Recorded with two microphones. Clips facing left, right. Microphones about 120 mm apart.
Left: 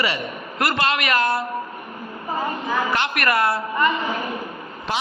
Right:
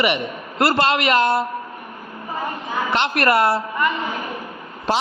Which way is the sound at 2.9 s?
30° right (ahead or behind).